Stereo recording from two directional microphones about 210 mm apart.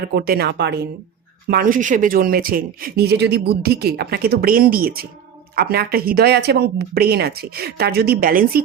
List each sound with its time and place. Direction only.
0.1 s speech: 50° right (ahead or behind)
1.5 s speech: 40° right (ahead or behind)